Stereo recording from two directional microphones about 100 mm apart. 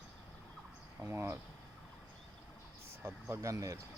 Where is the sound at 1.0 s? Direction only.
25° right (ahead or behind).